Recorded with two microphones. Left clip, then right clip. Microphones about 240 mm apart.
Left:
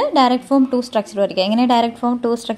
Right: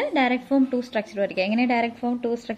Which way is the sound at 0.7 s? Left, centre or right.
Left.